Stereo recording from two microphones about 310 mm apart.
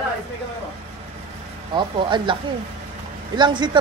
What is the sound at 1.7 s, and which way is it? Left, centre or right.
Speech, centre.